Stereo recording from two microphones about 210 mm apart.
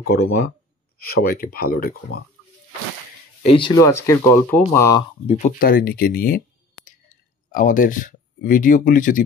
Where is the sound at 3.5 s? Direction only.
20° left (ahead or behind).